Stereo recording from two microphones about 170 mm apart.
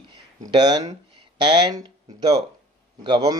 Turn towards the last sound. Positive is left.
turn(degrees=-25)  # may be behind; listen again after turning